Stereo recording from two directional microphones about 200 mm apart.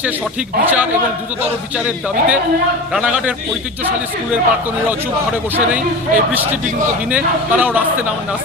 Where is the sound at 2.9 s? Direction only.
5° right (ahead or behind).